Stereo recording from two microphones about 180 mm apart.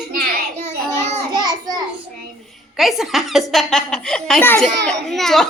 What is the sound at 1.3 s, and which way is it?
Child singing, 25° right (ahead or behind).